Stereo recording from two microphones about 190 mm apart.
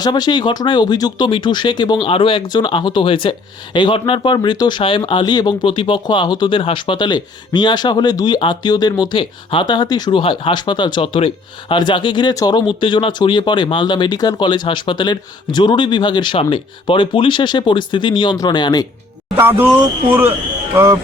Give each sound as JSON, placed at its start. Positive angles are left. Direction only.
{"t": 0.0, "sound": "speech", "side_deg": 20}
{"t": 19.4, "sound": "speech", "side_deg": -10}